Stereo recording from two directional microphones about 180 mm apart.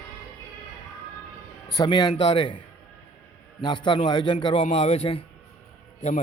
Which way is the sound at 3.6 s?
25° left (ahead or behind).